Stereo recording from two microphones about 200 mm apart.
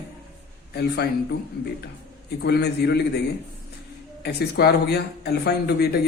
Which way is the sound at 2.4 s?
55° left (ahead or behind).